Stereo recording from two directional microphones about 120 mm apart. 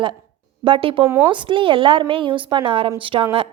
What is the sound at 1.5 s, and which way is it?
A woman's voice, 45° right (ahead or behind).